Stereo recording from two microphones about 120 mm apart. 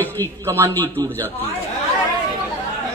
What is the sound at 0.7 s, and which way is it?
Speech, 15° left (ahead or behind).